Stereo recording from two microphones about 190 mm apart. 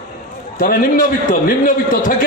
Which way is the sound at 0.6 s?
50° left (ahead or behind).